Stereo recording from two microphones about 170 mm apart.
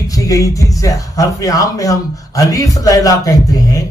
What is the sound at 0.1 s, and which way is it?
A man's voice, 20° left (ahead or behind).